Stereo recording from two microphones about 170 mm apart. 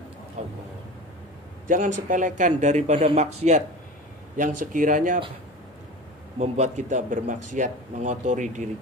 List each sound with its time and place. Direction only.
0.4 s vehicle: 40° right (ahead or behind)
1.7 s speech: 50° right (ahead or behind)
6.4 s speech: 40° right (ahead or behind)